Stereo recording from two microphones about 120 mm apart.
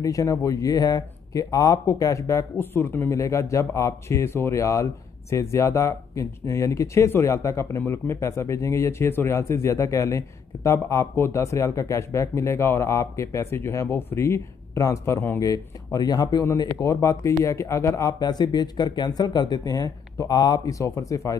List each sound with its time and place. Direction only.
0.0 s speech: 30° left (ahead or behind)